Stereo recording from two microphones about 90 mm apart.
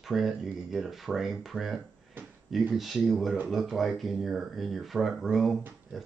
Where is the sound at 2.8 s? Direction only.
Centre (ahead or behind).